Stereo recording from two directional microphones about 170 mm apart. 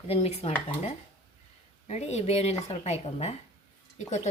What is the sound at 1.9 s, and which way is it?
Speech, 40° left (ahead or behind).